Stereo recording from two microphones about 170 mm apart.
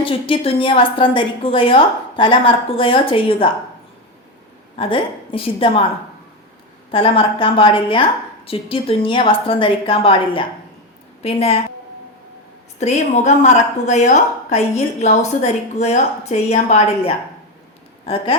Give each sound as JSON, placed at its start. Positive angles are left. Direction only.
{"t": 0.0, "sound": "a woman's voice", "side_deg": 30}
{"t": 4.8, "sound": "a woman's voice", "side_deg": 30}
{"t": 6.9, "sound": "a woman's voice", "side_deg": 30}
{"t": 12.8, "sound": "a woman's voice", "side_deg": 40}